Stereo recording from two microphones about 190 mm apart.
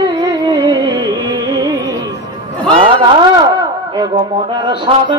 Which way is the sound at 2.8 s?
25° right (ahead or behind).